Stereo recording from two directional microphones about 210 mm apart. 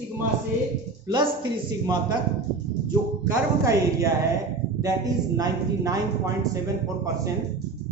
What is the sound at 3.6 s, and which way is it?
Speech, 15° right (ahead or behind).